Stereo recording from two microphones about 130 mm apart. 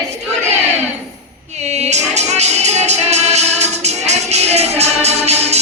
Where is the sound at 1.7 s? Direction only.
60° right (ahead or behind).